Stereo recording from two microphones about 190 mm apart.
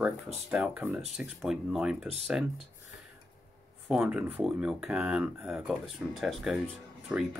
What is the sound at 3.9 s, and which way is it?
Speech, 5° right (ahead or behind).